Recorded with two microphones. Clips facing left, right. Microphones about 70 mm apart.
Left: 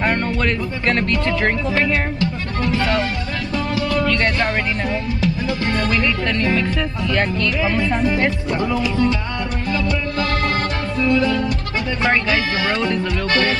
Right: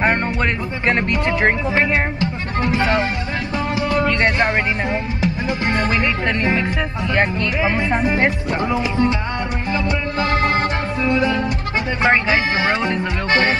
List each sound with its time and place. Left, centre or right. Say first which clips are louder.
0.0 s speech: right 1 dB; right
3.5 s music: right 1 dB; right